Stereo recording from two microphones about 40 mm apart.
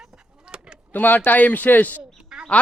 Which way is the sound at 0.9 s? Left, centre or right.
Left.